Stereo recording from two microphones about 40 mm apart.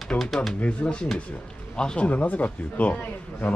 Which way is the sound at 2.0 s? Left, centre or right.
Left.